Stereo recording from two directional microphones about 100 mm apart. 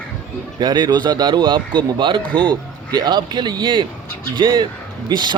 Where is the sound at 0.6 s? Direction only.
45° right (ahead or behind).